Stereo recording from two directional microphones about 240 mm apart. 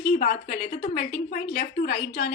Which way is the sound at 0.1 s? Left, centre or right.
Left.